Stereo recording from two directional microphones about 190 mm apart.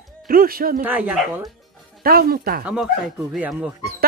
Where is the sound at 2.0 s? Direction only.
50° right (ahead or behind).